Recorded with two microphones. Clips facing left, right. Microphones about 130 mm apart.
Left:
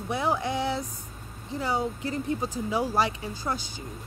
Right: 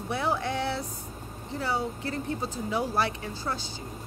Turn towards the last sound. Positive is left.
turn(degrees=15)  # may be behind; listen again after turning